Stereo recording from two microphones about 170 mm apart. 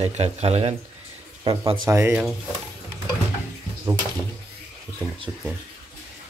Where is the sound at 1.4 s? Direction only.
25° right (ahead or behind).